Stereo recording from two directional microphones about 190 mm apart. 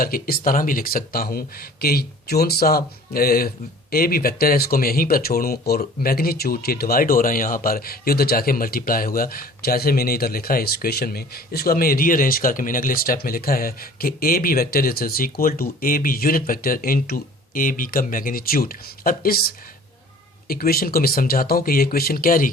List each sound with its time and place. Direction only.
0.0 s speech: 50° left (ahead or behind)